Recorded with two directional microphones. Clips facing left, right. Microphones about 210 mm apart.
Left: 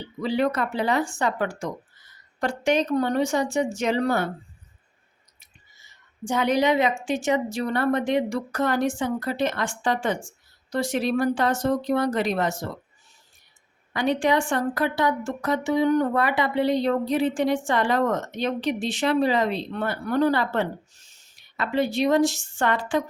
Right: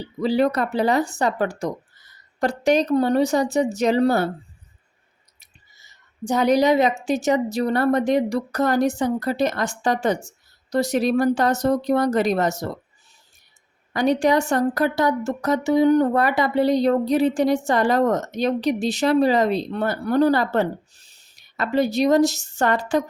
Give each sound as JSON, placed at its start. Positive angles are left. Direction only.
{"t": 0.2, "sound": "speech", "side_deg": -35}
{"t": 5.4, "sound": "speech", "side_deg": -40}
{"t": 13.9, "sound": "speech", "side_deg": -40}